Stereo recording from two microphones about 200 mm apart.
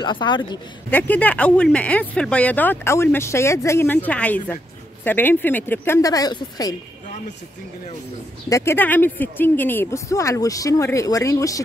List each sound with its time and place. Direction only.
0.0 s a man's voice: 20° left (ahead or behind)
0.8 s speech: 5° left (ahead or behind)
8.5 s speech: 15° left (ahead or behind)